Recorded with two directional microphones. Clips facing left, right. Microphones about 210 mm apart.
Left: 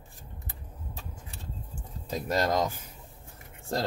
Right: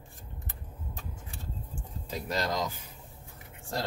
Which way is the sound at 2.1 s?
50° left (ahead or behind).